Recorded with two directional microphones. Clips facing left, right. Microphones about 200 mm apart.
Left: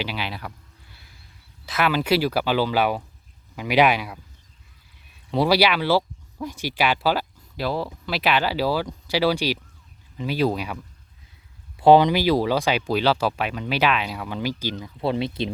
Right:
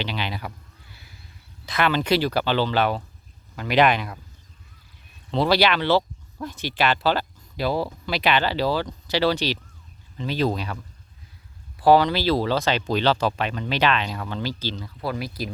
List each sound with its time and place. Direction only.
0.0 s speech: 5° left (ahead or behind)
1.6 s speech: 5° left (ahead or behind)
5.3 s speech: 10° left (ahead or behind)
11.8 s speech: 20° left (ahead or behind)
15.0 s speech: 25° left (ahead or behind)